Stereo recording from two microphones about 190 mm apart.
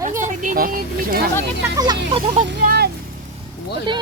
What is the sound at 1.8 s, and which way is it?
Speech, 25° right (ahead or behind).